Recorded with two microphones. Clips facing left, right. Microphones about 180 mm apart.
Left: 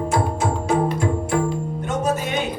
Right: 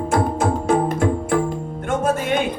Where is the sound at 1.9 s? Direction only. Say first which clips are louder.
Right 3 dB; 50° right (ahead or behind).